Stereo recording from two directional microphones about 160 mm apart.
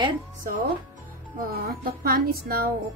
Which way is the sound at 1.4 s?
70° right (ahead or behind).